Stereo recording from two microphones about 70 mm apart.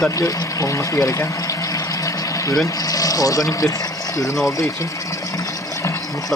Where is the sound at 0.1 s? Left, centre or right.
Left.